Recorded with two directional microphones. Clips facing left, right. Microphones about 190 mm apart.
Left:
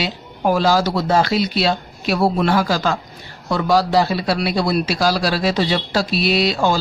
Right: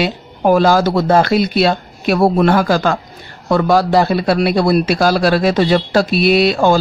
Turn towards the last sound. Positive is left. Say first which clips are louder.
# right 6 dB
turn(degrees=-55)  # may be behind; listen again after turning